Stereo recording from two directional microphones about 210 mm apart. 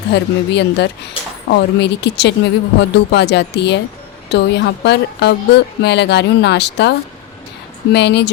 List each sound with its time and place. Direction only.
0.1 s a woman's voice: 55° left (ahead or behind)
7.9 s a woman's voice: 55° left (ahead or behind)